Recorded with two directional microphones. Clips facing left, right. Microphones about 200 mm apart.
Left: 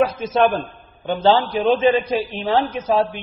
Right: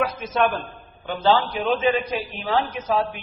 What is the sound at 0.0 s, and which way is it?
A man's voice, 30° left (ahead or behind).